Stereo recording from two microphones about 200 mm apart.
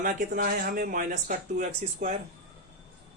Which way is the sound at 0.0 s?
40° right (ahead or behind).